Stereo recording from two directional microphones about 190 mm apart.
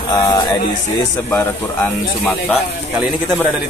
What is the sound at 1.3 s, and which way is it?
Speech, 10° left (ahead or behind).